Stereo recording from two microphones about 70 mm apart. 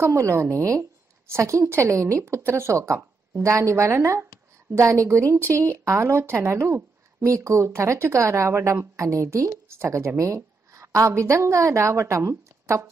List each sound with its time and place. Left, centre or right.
0.0 s a woman's voice: right